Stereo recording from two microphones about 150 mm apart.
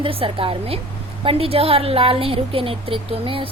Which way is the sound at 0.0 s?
35° right (ahead or behind).